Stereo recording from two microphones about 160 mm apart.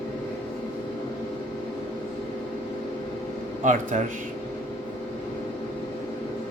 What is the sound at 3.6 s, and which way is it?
Speech, 50° right (ahead or behind).